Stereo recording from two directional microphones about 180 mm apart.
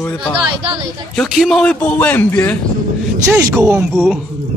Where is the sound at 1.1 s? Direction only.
5° left (ahead or behind).